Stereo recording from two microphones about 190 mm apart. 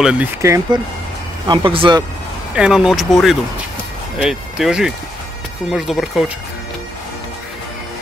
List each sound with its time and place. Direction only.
0.0 s speech: 5° right (ahead or behind)
0.4 s speech: 15° right (ahead or behind)
1.5 s speech: 25° right (ahead or behind)
2.5 s speech: 5° right (ahead or behind)